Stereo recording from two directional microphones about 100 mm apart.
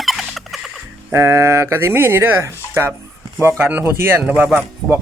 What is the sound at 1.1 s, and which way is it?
Speech, 25° right (ahead or behind).